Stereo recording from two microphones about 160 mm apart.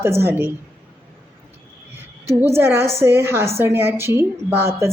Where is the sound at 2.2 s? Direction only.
15° right (ahead or behind).